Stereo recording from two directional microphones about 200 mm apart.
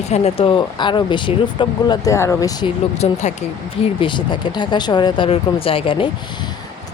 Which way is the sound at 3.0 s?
30° left (ahead or behind).